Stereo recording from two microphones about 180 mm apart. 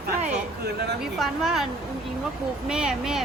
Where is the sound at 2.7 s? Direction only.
5° right (ahead or behind).